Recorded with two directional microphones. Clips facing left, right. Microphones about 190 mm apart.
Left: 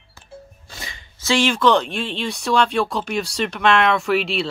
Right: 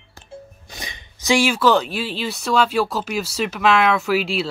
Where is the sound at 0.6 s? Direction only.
20° right (ahead or behind).